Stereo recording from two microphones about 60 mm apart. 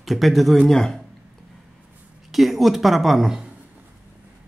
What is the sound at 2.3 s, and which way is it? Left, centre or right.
Speech, centre.